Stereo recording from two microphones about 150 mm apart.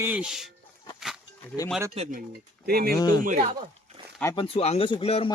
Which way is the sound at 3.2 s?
55° right (ahead or behind).